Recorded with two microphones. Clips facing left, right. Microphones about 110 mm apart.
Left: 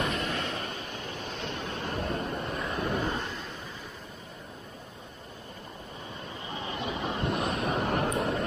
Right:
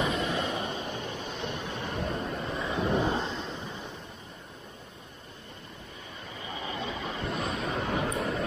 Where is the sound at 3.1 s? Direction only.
25° right (ahead or behind).